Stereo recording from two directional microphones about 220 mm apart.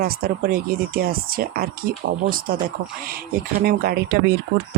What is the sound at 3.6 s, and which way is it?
Speech, 45° right (ahead or behind).